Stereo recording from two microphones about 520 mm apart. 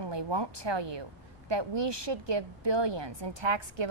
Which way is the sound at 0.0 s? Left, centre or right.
Right.